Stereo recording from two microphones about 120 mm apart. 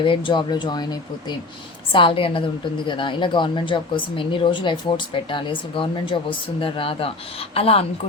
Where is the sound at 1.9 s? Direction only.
45° left (ahead or behind).